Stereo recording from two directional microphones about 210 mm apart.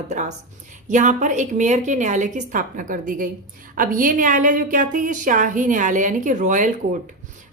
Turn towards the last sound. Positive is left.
turn(degrees=-35)  # may be behind; listen again after turning